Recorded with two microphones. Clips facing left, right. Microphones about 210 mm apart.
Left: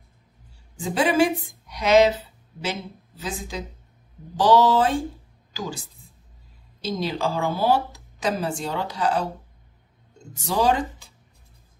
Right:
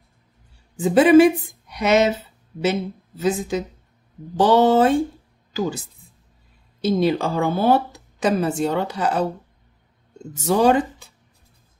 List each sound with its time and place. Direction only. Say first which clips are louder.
0.7 s speech: right 8 dB; 55° right (ahead or behind)
6.8 s speech: right 7 dB; 55° right (ahead or behind)
10.4 s speech: right 5 dB; 55° right (ahead or behind)